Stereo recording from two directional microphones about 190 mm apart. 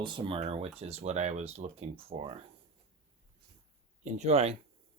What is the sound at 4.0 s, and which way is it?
Speech, 35° right (ahead or behind).